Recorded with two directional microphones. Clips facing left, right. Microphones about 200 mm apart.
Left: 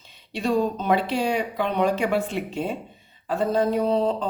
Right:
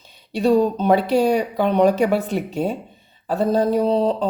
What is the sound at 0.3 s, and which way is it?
Speech, 35° right (ahead or behind).